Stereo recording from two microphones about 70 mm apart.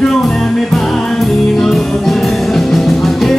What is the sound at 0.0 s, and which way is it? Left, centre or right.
Music, centre.